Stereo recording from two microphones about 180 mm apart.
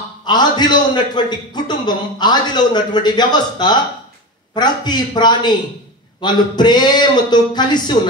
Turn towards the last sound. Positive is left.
turn(degrees=25)  # may be behind; listen again after turning